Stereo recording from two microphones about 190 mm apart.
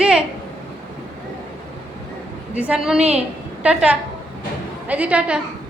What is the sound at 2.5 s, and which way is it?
A woman's voice, 5° right (ahead or behind).